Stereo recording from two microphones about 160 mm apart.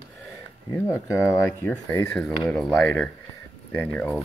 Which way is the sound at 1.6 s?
15° left (ahead or behind).